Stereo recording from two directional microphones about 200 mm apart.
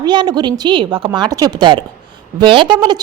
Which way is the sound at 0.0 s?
20° right (ahead or behind).